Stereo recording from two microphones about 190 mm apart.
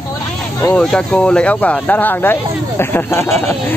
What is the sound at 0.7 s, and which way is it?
Speech, 5° left (ahead or behind).